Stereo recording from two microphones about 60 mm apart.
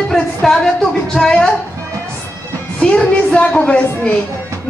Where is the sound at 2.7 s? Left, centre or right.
Centre.